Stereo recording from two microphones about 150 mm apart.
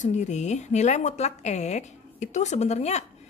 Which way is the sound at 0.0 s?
50° left (ahead or behind).